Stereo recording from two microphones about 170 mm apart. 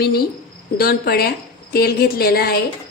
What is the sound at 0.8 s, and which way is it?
A woman's voice, 65° left (ahead or behind).